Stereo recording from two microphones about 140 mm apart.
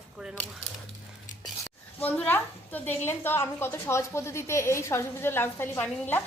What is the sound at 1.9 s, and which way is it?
A woman's voice, 10° left (ahead or behind).